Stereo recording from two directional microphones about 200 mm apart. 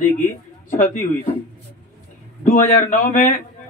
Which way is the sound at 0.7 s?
40° left (ahead or behind).